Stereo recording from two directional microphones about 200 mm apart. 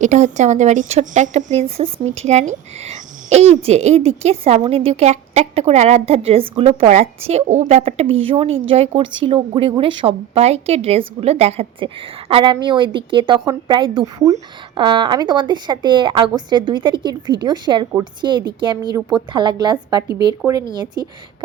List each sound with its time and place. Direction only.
0.0 s speech: 35° right (ahead or behind); by 21.1 s 20° right (ahead or behind)